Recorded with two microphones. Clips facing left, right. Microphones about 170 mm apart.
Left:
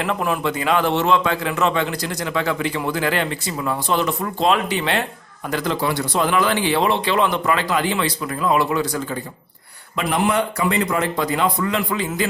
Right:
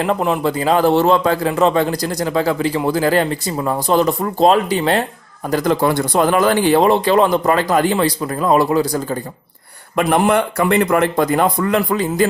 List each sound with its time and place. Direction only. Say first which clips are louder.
0.0 s a man's voice: right 5 dB; 30° right (ahead or behind)
9.9 s a man's voice: right 6 dB; 50° right (ahead or behind)